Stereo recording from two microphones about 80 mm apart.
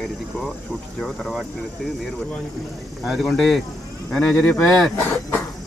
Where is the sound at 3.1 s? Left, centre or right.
Centre.